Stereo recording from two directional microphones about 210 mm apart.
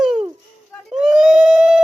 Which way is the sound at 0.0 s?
5° right (ahead or behind).